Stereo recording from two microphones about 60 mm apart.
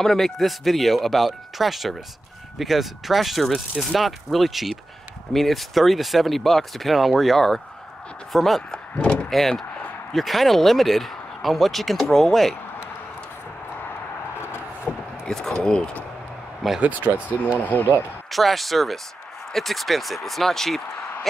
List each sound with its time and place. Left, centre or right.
0.0 s speech: centre
8.7 s a sound: centre
9.3 s speech: centre
14.9 s a sound: centre
15.2 s speech: centre
16.8 s speech: right
18.3 s speech: centre